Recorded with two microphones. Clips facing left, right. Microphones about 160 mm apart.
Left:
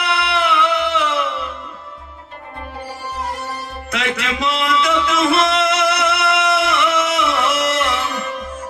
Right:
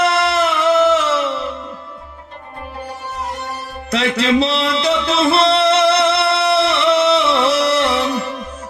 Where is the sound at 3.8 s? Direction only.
35° right (ahead or behind).